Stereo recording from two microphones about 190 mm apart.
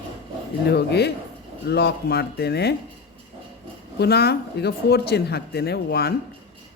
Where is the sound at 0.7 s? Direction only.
60° left (ahead or behind).